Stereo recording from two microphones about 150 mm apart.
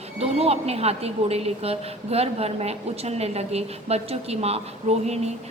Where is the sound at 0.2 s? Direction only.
45° right (ahead or behind).